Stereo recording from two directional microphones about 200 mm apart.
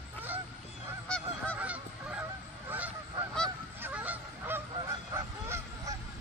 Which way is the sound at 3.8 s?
10° right (ahead or behind).